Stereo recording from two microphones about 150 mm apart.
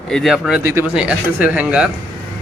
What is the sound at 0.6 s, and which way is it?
Speech, 20° right (ahead or behind).